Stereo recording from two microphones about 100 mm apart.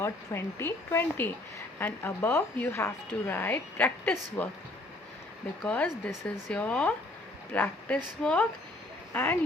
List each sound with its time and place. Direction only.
0.0 s a woman's voice: 25° left (ahead or behind)
5.6 s a woman's voice: 15° left (ahead or behind)